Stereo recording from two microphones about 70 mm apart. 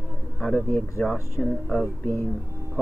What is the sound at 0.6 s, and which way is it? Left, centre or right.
Speech, left.